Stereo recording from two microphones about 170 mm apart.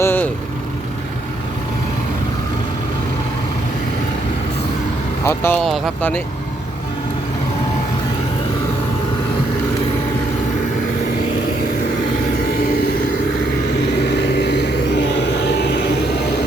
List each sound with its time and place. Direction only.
0.0 s vehicle: 10° left (ahead or behind)
5.2 s speech: 15° left (ahead or behind)
5.6 s speech: centre (ahead or behind)
6.0 s speech: 10° left (ahead or behind)
13.8 s vehicle: 85° left